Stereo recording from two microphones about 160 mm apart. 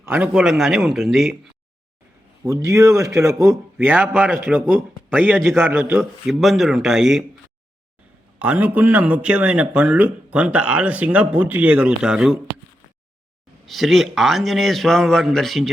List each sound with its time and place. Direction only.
0.0 s a man's voice: 10° right (ahead or behind)
2.4 s a man's voice: 20° right (ahead or behind)
4.6 s speech: 5° left (ahead or behind)
5.1 s a man's voice: 10° right (ahead or behind)
8.4 s a man's voice: 10° right (ahead or behind)
13.7 s a man's voice: centre (ahead or behind)